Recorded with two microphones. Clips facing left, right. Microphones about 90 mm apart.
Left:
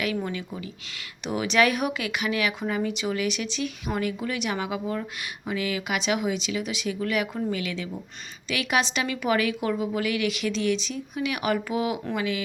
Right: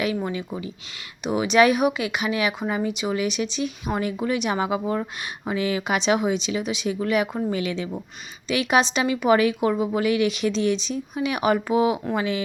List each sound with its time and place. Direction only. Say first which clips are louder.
0.0 s speech: right 3 dB; 25° right (ahead or behind)